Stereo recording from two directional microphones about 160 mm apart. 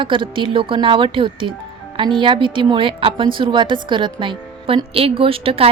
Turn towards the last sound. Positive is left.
turn(degrees=-35)  # may be behind; listen again after turning